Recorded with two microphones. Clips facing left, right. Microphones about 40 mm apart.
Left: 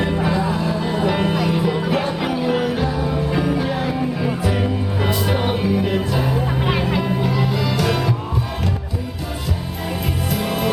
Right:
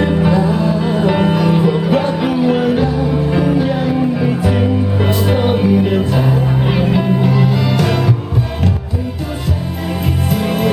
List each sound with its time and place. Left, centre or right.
0.0 s music: centre
10.3 s music: centre